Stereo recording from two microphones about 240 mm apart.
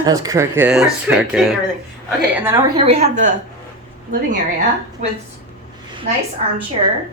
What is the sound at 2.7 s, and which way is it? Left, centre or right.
Speech, right.